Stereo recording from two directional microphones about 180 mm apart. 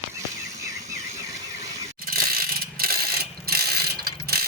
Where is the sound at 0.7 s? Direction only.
20° right (ahead or behind).